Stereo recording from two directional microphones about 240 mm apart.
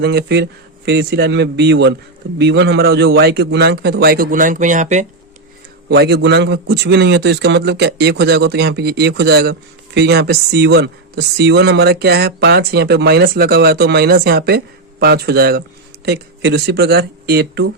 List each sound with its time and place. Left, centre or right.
0.0 s a man's voice: right
5.9 s a man's voice: right